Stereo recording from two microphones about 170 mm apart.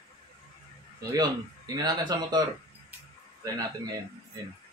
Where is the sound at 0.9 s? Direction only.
25° right (ahead or behind).